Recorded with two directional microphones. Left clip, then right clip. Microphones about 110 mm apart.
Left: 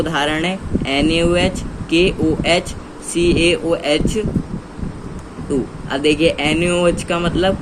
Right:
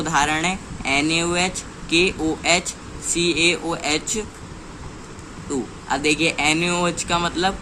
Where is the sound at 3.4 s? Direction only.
35° right (ahead or behind).